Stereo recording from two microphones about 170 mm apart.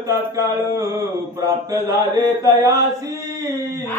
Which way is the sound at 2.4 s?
20° right (ahead or behind).